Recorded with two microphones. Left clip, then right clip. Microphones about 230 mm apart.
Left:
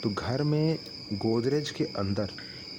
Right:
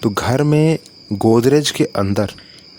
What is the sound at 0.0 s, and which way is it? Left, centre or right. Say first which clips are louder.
Speech: right 13 dB; right.